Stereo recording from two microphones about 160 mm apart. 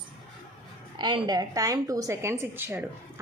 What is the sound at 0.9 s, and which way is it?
A woman's voice, 30° right (ahead or behind).